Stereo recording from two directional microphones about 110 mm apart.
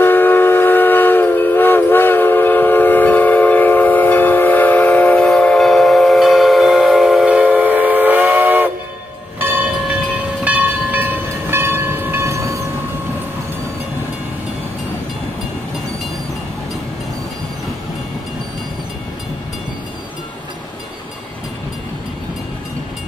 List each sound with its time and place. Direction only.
0.0 s train: 20° left (ahead or behind); by 12.6 s 25° right (ahead or behind)